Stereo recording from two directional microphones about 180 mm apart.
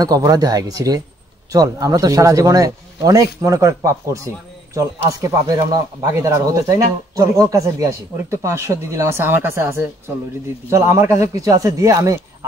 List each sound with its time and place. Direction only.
0.0 s speech: 20° right (ahead or behind)
5.5 s speech: 20° right (ahead or behind)